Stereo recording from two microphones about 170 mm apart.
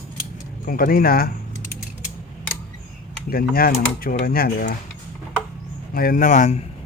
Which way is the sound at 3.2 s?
60° left (ahead or behind).